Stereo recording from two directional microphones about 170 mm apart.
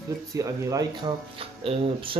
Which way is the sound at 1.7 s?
30° right (ahead or behind).